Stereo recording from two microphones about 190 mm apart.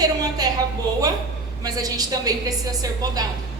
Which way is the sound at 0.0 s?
20° right (ahead or behind).